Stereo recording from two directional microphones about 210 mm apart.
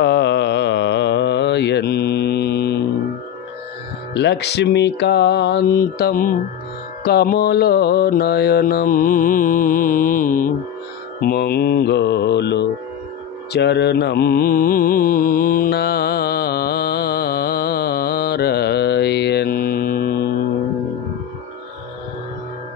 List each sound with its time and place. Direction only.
0.0 s mantra: 55° left (ahead or behind)
4.1 s music: 55° left (ahead or behind)
7.1 s mantra: 50° left (ahead or behind)
11.1 s music: 45° left (ahead or behind)
13.5 s mantra: 55° left (ahead or behind)